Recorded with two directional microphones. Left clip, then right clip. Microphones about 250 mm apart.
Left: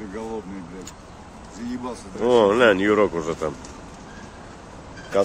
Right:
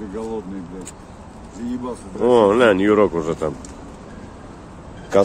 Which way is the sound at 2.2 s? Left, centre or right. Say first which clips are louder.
Right 3 dB; centre.